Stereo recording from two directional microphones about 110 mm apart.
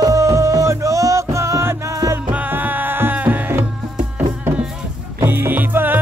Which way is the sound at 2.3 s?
15° right (ahead or behind).